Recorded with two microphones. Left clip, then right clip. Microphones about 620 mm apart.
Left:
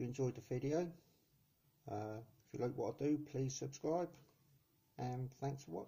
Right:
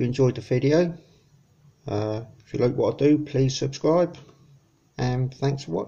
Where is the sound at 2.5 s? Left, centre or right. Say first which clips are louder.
Right 19 dB; centre.